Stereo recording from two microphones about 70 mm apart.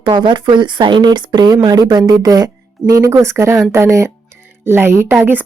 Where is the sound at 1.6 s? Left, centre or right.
Right.